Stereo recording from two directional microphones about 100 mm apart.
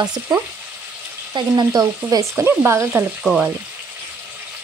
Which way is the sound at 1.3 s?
40° right (ahead or behind).